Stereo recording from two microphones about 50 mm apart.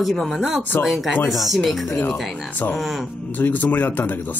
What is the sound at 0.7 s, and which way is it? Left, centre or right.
Speech, left.